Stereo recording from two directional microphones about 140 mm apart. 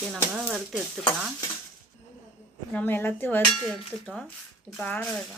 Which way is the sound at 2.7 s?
10° left (ahead or behind).